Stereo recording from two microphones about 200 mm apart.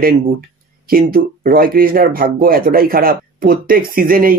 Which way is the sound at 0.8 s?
45° right (ahead or behind).